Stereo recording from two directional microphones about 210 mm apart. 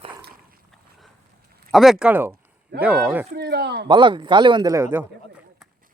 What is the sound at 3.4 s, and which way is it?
Speech, 50° right (ahead or behind).